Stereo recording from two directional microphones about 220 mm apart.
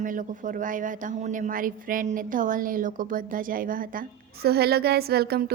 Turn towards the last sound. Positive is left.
turn(degrees=-45)  # may be behind; listen again after turning